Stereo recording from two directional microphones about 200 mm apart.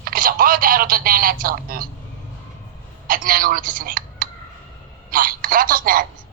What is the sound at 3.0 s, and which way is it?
A woman's voice, 45° right (ahead or behind).